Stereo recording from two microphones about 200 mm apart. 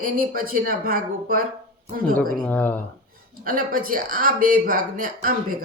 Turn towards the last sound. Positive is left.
turn(degrees=-40)  # may be behind; listen again after turning